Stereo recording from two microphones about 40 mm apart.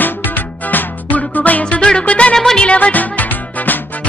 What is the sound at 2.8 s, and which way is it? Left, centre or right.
Music, left.